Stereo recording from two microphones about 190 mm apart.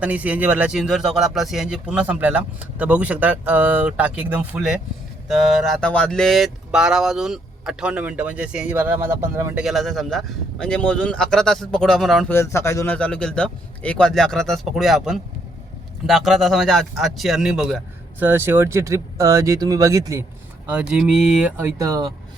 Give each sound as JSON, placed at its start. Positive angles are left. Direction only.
{"t": 0.0, "sound": "speech", "side_deg": -5}
{"t": 9.6, "sound": "speech", "side_deg": 0}
{"t": 12.3, "sound": "speech", "side_deg": 15}
{"t": 20.9, "sound": "speech", "side_deg": -5}
{"t": 21.8, "sound": "speech", "side_deg": -20}